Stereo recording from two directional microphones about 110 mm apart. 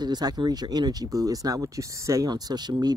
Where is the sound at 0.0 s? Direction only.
40° right (ahead or behind).